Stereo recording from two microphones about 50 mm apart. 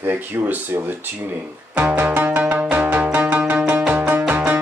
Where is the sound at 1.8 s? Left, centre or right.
Right.